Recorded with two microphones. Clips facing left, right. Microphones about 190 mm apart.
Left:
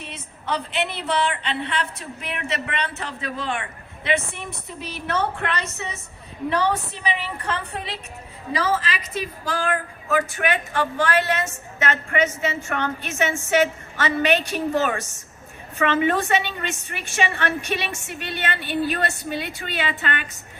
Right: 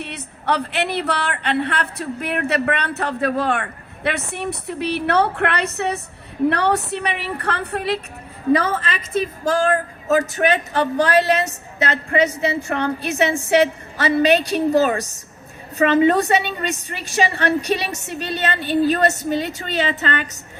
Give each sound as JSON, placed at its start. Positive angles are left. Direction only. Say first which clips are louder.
{"t": 0.0, "sound": "a woman's voice", "louder": "right 7 dB", "side_deg": -65}